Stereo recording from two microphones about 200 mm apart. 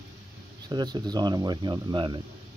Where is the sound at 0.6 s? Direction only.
20° right (ahead or behind).